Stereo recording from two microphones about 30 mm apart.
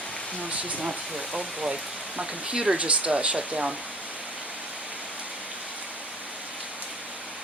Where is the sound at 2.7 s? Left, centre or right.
Right.